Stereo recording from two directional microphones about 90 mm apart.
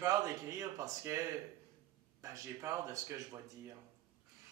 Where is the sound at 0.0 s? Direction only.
35° right (ahead or behind).